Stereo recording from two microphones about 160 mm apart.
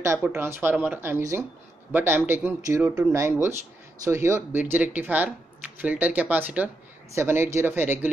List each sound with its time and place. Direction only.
0.0 s speech: 15° right (ahead or behind)